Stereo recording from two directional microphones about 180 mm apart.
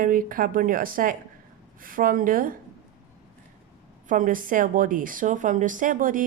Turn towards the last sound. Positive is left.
turn(degrees=-50)  # may be behind; listen again after turning